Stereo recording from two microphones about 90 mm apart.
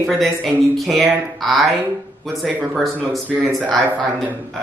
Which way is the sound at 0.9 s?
Centre (ahead or behind).